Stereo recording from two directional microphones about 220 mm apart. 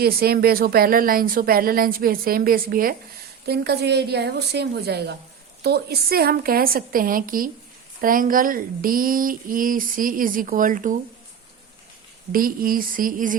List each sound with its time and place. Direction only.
0.0 s a woman's voice: 45° right (ahead or behind)
12.3 s speech: 40° right (ahead or behind)